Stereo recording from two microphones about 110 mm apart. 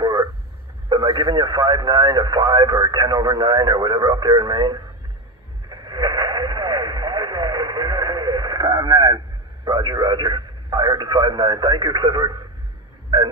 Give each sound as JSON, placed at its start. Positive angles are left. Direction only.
{"t": 0.0, "sound": "a sound", "side_deg": -40}
{"t": 0.8, "sound": "speech", "side_deg": -40}
{"t": 5.7, "sound": "radio", "side_deg": -40}
{"t": 9.7, "sound": "speech", "side_deg": -40}